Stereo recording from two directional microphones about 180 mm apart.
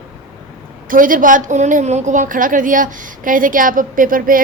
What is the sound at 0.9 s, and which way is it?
A woman's voice, 50° right (ahead or behind).